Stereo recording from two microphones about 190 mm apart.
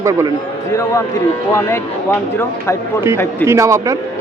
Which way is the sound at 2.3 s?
15° left (ahead or behind).